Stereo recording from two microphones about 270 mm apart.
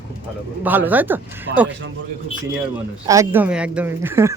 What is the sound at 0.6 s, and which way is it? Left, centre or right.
Speech, centre.